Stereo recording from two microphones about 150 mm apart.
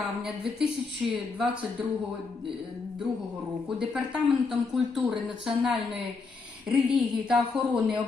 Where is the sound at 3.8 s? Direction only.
5° right (ahead or behind).